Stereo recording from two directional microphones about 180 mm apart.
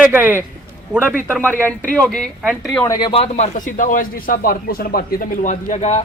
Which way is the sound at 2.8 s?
20° left (ahead or behind).